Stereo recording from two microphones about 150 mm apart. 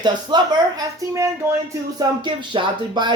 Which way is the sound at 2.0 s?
30° right (ahead or behind).